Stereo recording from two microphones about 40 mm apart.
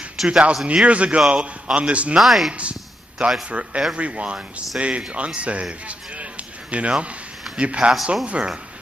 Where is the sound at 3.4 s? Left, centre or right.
Right.